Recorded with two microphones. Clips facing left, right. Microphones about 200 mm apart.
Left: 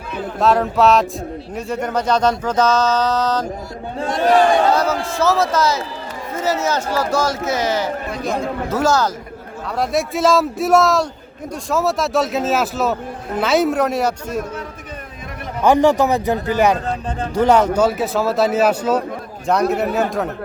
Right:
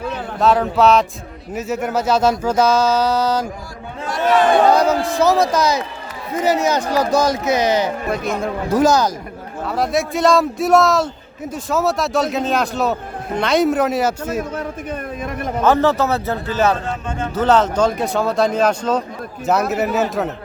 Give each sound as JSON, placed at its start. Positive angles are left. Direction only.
{"t": 0.3, "sound": "a man's voice", "side_deg": 0}
{"t": 4.2, "sound": "speech", "side_deg": 35}
{"t": 4.7, "sound": "speech", "side_deg": -15}
{"t": 9.6, "sound": "a man's voice", "side_deg": 0}
{"t": 15.6, "sound": "speech", "side_deg": 15}
{"t": 19.5, "sound": "a man's voice", "side_deg": -5}